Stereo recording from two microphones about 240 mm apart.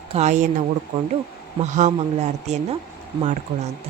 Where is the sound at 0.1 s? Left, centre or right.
Right.